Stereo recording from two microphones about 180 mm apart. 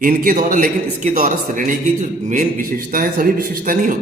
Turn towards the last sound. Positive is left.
turn(degrees=-50)  # may be behind; listen again after turning